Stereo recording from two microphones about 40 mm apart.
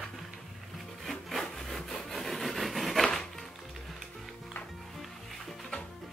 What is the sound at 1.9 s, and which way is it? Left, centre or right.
Wood, centre.